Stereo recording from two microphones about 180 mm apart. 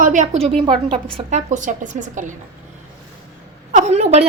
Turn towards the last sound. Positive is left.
turn(degrees=-35)  # may be behind; listen again after turning